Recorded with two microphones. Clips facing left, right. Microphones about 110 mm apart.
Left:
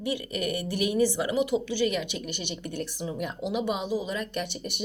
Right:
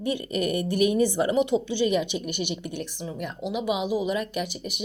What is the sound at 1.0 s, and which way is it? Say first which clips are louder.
Speech: right 3 dB; 40° right (ahead or behind).